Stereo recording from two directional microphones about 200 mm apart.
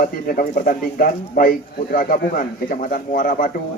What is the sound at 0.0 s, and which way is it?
Speech, 45° left (ahead or behind).